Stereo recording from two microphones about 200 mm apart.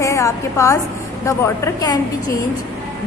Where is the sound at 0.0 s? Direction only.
15° left (ahead or behind).